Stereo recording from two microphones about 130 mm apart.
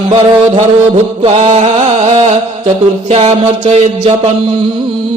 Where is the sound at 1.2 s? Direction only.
55° right (ahead or behind).